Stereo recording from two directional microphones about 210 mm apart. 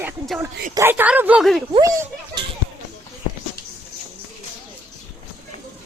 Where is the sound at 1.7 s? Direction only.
20° right (ahead or behind).